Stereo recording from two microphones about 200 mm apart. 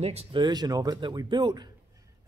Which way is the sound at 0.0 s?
30° right (ahead or behind).